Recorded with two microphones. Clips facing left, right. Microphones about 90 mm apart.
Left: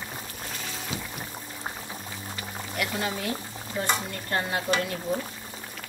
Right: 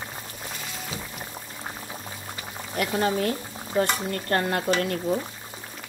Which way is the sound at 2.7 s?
40° right (ahead or behind).